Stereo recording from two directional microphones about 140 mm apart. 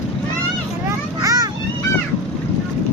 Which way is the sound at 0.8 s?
25° right (ahead or behind).